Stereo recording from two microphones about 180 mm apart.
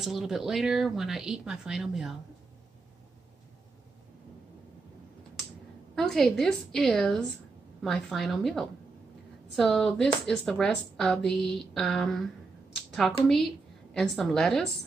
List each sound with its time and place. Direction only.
0.0 s speech: centre (ahead or behind)
5.9 s speech: centre (ahead or behind)